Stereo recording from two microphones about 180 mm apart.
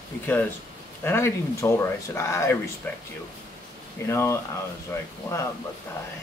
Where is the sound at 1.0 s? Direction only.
15° left (ahead or behind).